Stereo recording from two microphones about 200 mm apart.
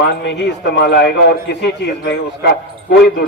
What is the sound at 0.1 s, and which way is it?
A man's voice, 60° left (ahead or behind).